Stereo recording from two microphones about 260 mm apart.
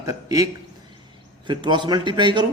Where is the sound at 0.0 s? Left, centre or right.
Centre.